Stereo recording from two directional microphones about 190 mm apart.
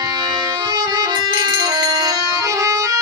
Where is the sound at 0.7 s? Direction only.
25° right (ahead or behind).